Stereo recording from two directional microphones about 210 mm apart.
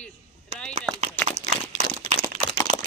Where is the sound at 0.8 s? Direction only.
30° right (ahead or behind).